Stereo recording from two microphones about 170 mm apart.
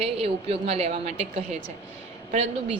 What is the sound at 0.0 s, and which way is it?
A woman's voice, 35° right (ahead or behind).